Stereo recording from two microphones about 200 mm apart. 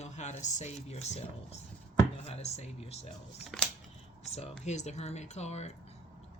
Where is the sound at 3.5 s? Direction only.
Centre (ahead or behind).